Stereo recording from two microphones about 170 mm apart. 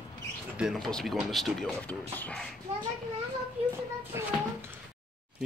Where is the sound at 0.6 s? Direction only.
Centre (ahead or behind).